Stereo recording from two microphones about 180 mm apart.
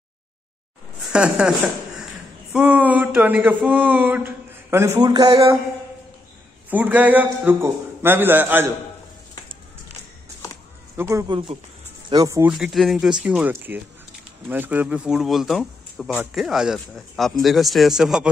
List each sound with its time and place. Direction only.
1.1 s a man's voice: 5° right (ahead or behind)
2.5 s speech: 10° right (ahead or behind)
6.7 s speech: 10° right (ahead or behind)
11.0 s speech: 15° right (ahead or behind)
12.5 s a man's voice: centre (ahead or behind)